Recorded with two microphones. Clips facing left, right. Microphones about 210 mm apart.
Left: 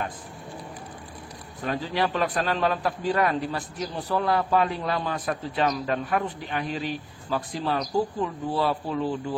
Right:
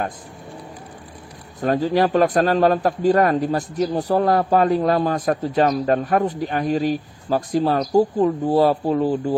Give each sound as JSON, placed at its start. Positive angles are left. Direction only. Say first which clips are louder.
{"t": 1.6, "sound": "a man's voice", "louder": "right 9 dB", "side_deg": -45}